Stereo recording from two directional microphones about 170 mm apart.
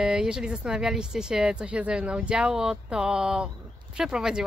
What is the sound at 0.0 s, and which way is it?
Speech, 5° right (ahead or behind).